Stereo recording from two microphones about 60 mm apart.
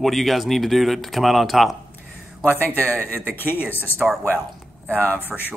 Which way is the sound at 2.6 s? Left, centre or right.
Left.